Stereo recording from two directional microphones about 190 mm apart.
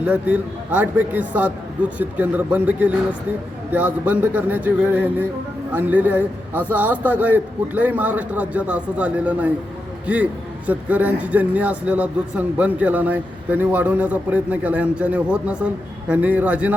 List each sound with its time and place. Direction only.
0.0 s a man's voice: 5° right (ahead or behind)
10.7 s a man's voice: 10° right (ahead or behind)